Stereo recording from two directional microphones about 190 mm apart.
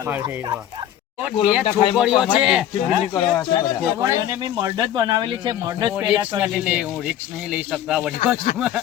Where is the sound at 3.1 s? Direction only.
25° left (ahead or behind).